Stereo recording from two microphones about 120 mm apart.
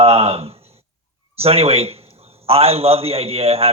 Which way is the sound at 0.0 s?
55° right (ahead or behind).